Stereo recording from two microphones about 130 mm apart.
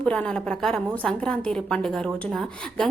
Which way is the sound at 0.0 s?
10° left (ahead or behind).